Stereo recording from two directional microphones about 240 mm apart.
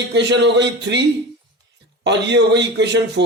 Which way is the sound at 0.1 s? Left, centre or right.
Right.